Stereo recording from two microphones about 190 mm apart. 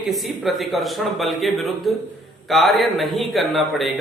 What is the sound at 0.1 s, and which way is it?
A man's voice, centre (ahead or behind).